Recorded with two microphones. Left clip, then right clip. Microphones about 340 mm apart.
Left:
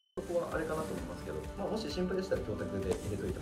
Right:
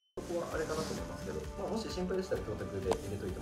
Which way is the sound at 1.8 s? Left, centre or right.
Centre.